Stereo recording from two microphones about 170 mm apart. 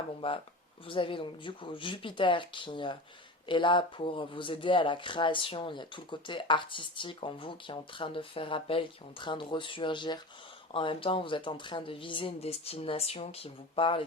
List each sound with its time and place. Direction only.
0.2 s speech: 30° left (ahead or behind)